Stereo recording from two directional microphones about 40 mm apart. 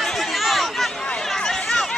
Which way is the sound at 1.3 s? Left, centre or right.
Centre.